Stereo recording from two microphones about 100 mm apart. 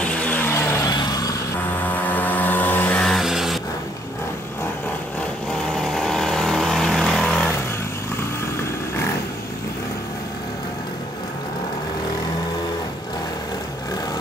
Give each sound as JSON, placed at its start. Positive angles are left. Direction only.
{"t": 0.0, "sound": "vehicle", "side_deg": 15}
{"t": 0.8, "sound": "vehicle", "side_deg": 40}
{"t": 2.0, "sound": "vehicle", "side_deg": 15}
{"t": 3.1, "sound": "vehicle", "side_deg": -5}
{"t": 5.8, "sound": "vehicle", "side_deg": 5}